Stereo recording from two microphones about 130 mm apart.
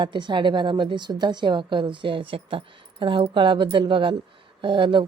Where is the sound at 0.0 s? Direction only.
35° right (ahead or behind).